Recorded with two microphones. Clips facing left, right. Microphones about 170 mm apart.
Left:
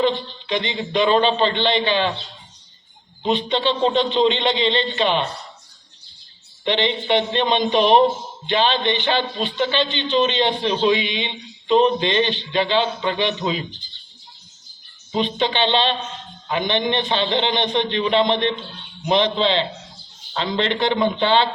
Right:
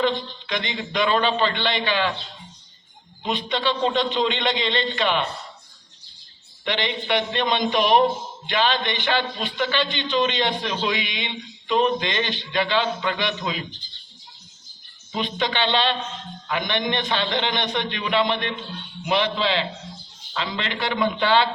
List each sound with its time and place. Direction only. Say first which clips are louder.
0.4 s a man's voice: left 6 dB; 20° left (ahead or behind)
3.2 s a man's voice: left 4 dB; 25° left (ahead or behind)
6.7 s a man's voice: left 5 dB; 25° left (ahead or behind)
15.1 s a man's voice: left 4 dB; 20° left (ahead or behind)